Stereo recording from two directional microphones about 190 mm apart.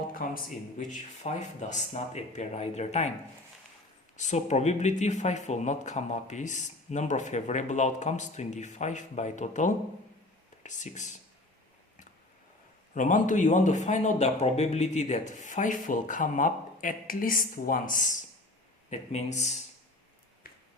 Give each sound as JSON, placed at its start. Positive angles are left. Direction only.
{"t": 0.1, "sound": "speech", "side_deg": 50}
{"t": 4.2, "sound": "speech", "side_deg": 35}
{"t": 12.9, "sound": "speech", "side_deg": 40}
{"t": 20.4, "sound": "finger snapping", "side_deg": 50}